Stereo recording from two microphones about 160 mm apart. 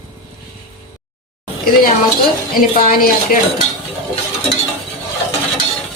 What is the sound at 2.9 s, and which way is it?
Dishes, 65° left (ahead or behind).